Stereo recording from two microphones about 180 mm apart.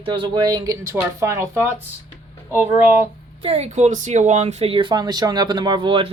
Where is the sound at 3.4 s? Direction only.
35° right (ahead or behind).